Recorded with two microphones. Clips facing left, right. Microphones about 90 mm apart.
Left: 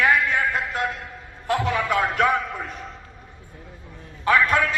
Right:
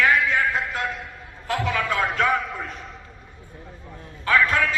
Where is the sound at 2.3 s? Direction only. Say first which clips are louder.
Even; centre (ahead or behind).